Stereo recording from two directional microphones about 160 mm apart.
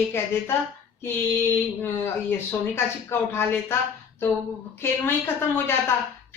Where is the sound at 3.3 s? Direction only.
15° left (ahead or behind).